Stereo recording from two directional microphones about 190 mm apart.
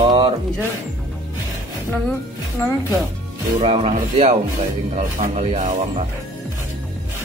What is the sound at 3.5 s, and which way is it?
Speech, 30° right (ahead or behind).